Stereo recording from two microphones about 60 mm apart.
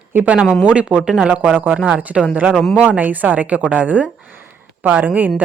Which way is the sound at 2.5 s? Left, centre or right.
Centre.